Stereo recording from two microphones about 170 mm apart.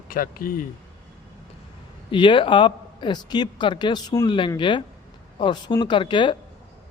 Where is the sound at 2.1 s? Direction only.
30° left (ahead or behind).